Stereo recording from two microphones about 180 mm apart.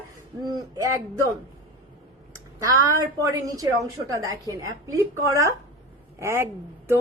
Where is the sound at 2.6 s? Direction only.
20° right (ahead or behind).